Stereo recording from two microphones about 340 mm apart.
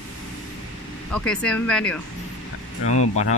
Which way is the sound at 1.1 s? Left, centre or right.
Centre.